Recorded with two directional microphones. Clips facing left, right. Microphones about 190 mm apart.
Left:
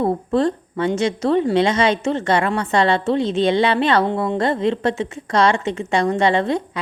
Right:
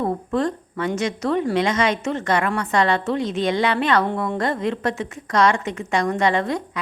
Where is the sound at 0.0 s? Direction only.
30° left (ahead or behind).